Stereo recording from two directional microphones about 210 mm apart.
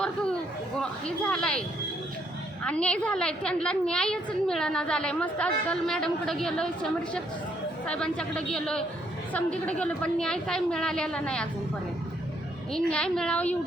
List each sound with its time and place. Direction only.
0.8 s a woman's voice: 5° left (ahead or behind)
2.6 s a woman's voice: 5° left (ahead or behind)
12.7 s a woman's voice: 5° left (ahead or behind)